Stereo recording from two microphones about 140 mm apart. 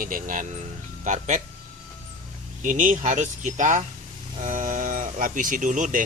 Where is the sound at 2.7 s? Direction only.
70° right (ahead or behind).